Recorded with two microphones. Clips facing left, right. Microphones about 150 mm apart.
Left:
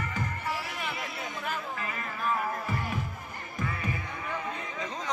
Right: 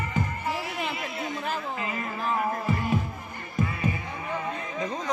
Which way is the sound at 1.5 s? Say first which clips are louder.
Right 4 dB; 25° right (ahead or behind).